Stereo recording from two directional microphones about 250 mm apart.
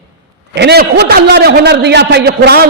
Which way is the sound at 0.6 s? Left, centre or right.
Right.